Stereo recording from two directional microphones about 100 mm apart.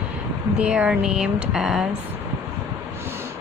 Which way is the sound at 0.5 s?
10° right (ahead or behind).